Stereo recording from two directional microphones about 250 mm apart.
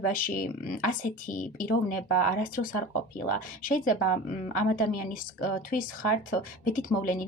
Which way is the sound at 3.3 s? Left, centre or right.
Left.